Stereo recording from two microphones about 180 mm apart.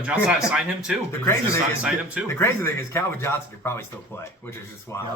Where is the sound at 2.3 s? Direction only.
15° left (ahead or behind).